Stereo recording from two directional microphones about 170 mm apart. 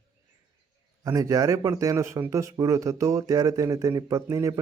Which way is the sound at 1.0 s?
20° right (ahead or behind).